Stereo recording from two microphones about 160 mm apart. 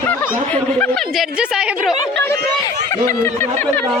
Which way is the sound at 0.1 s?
10° left (ahead or behind).